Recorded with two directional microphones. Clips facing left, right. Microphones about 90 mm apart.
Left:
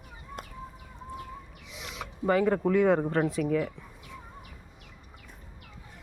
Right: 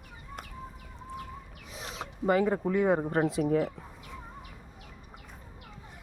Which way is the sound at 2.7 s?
15° right (ahead or behind).